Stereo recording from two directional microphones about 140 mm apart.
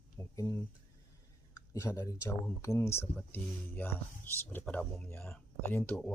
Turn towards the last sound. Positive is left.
turn(degrees=5)  # may be behind; listen again after turning